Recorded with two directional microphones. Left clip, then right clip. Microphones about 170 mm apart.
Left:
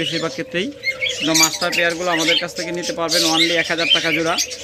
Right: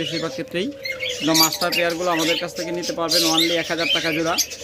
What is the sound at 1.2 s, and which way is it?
Speech, centre (ahead or behind).